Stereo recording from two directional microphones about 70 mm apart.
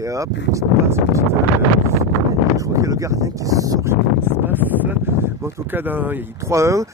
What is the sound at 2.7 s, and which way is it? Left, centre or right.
Speech, right.